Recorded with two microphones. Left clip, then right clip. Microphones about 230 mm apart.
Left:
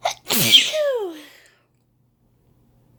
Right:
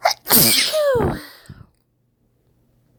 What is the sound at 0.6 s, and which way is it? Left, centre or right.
Sneeze, right.